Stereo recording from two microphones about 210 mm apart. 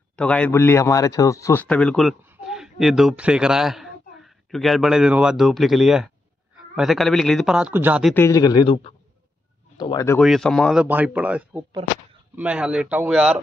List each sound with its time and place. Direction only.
0.1 s a man's voice: 5° left (ahead or behind)
8.1 s speech: 15° left (ahead or behind)
10.2 s speech: centre (ahead or behind)